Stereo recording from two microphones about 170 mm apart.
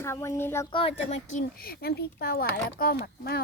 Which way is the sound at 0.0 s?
15° left (ahead or behind).